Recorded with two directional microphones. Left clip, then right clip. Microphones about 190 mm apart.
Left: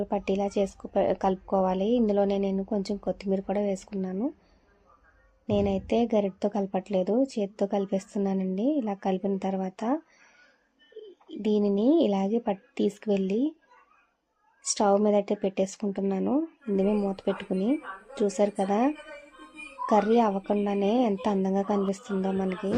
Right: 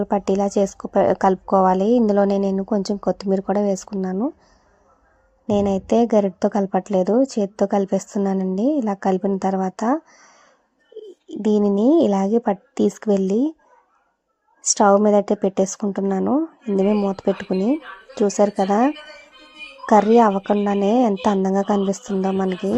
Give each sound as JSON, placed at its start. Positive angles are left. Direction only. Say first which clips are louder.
{"t": 0.0, "sound": "a woman's voice", "louder": "right 8 dB", "side_deg": -35}
{"t": 5.5, "sound": "a woman's voice", "louder": "right 7 dB", "side_deg": -35}
{"t": 11.3, "sound": "a woman's voice", "louder": "right 7 dB", "side_deg": -35}
{"t": 14.6, "sound": "a woman's voice", "louder": "right 9 dB", "side_deg": -30}